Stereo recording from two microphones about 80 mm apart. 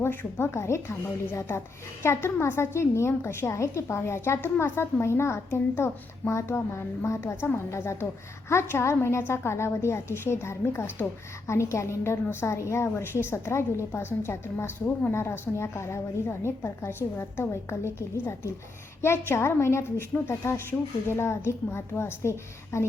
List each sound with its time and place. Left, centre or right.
0.0 s a woman's voice: left